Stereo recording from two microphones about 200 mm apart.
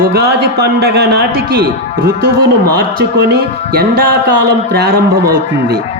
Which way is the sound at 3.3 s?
50° right (ahead or behind).